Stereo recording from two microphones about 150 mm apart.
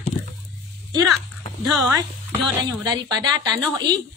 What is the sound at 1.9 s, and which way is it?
Speech, 20° right (ahead or behind).